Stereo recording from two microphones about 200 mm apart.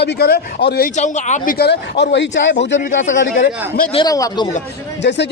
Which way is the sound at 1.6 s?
55° left (ahead or behind).